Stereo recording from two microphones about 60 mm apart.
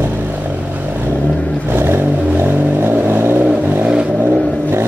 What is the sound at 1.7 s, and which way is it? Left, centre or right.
Vehicle, right.